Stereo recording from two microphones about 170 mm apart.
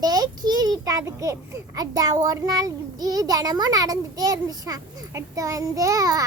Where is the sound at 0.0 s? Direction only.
20° right (ahead or behind).